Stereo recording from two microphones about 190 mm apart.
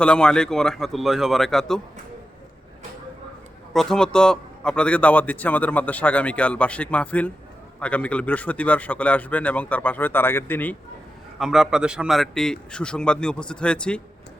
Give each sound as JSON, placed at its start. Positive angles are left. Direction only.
{"t": 0.0, "sound": "a man's voice", "side_deg": 5}
{"t": 3.7, "sound": "a man's voice", "side_deg": 0}
{"t": 11.3, "sound": "a man's voice", "side_deg": 0}